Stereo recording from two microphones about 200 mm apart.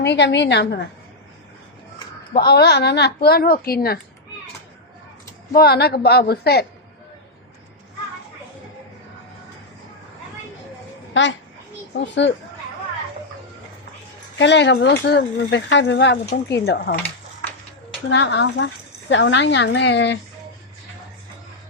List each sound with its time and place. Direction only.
0.0 s speech: 60° left (ahead or behind)
2.3 s a woman's voice: 55° left (ahead or behind)
5.5 s a woman's voice: 50° left (ahead or behind)
11.1 s a child's voice: 65° left (ahead or behind)
14.3 s a woman's voice: 60° left (ahead or behind)
18.1 s speech: 60° left (ahead or behind)